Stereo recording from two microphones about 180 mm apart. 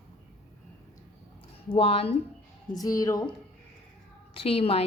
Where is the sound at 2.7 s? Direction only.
20° left (ahead or behind).